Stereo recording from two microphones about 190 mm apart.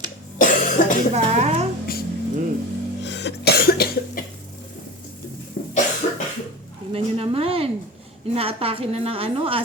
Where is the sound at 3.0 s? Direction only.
65° left (ahead or behind).